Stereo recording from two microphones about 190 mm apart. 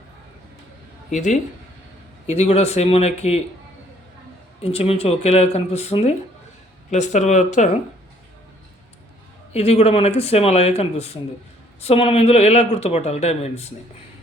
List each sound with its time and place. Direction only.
1.1 s speech: 40° left (ahead or behind)
4.6 s speech: 35° left (ahead or behind)
9.5 s speech: 35° left (ahead or behind)